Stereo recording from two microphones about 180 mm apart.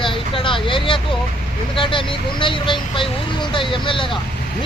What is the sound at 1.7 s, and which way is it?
Speech, 30° left (ahead or behind).